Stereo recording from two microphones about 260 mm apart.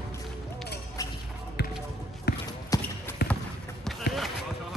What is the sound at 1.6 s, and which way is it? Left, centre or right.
Basketball bounce, left.